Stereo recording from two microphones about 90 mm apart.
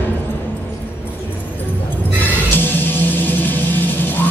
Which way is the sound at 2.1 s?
20° left (ahead or behind).